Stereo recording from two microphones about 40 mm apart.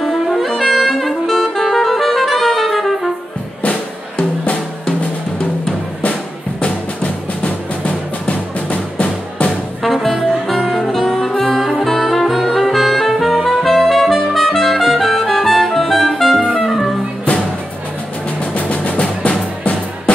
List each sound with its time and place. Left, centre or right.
0.0 s saxophone: centre
1.5 s music: centre
4.2 s music: left
6.6 s music: left
9.8 s music: centre
10.4 s saxophone: centre
11.8 s music: centre
18.4 s music: left